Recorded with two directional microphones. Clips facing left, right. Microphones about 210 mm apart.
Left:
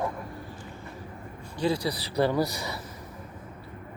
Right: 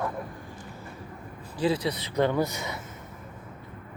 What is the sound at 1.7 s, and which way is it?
Speech, 30° left (ahead or behind).